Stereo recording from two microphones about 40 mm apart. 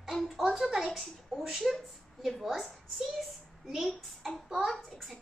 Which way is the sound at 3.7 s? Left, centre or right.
Centre.